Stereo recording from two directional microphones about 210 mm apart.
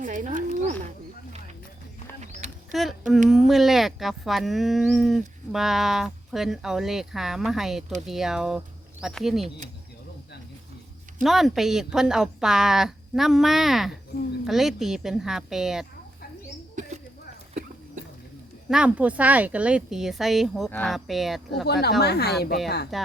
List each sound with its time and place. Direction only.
0.0 s speech: 35° right (ahead or behind)
2.2 s a sound: 35° right (ahead or behind)
2.7 s speech: centre (ahead or behind)
11.2 s speech: centre (ahead or behind)
18.7 s speech: 5° right (ahead or behind)
21.7 s speech: 50° left (ahead or behind)
22.9 s speech: centre (ahead or behind)